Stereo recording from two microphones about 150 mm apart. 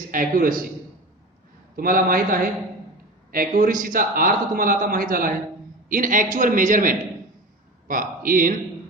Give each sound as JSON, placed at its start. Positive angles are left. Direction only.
{"t": 0.1, "sound": "a man's voice", "side_deg": -70}
{"t": 1.7, "sound": "a man's voice", "side_deg": -70}